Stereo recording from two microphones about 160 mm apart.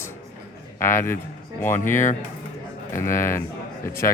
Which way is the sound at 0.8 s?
15° left (ahead or behind).